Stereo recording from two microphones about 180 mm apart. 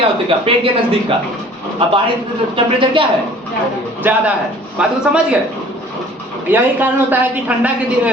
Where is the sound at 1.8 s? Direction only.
30° right (ahead or behind).